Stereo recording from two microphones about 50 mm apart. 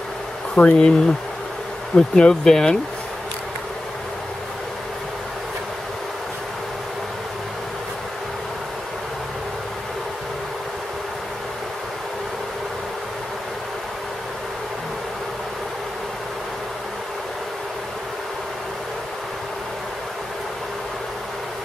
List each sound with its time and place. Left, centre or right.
0.6 s speech: left
2.0 s speech: centre